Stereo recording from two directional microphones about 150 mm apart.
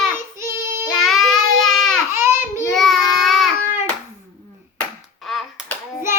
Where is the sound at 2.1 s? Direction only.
15° right (ahead or behind).